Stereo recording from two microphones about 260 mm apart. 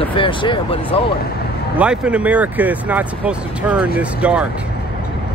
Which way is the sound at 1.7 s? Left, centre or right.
Centre.